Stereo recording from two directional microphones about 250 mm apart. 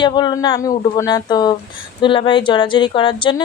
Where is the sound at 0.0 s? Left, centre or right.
Centre.